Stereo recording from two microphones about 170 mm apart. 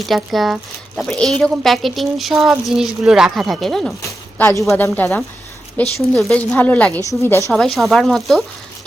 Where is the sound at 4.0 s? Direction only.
15° left (ahead or behind).